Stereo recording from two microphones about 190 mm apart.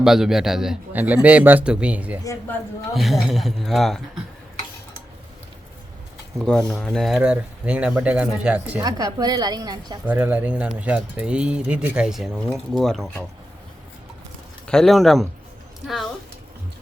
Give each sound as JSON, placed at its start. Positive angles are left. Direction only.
{"t": 0.0, "sound": "speech", "side_deg": 0}
{"t": 2.2, "sound": "speech", "side_deg": 15}
{"t": 2.9, "sound": "speech", "side_deg": 0}
{"t": 6.4, "sound": "speech", "side_deg": 0}
{"t": 8.8, "sound": "speech", "side_deg": -20}
{"t": 10.1, "sound": "speech", "side_deg": -10}
{"t": 14.7, "sound": "speech", "side_deg": 0}